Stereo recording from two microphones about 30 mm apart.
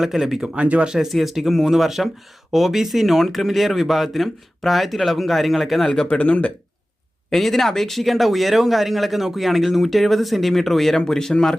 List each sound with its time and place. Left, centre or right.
0.0 s speech: centre
0.5 s speech: right
1.1 s speech: centre
6.1 s speech: left
7.3 s a man's voice: centre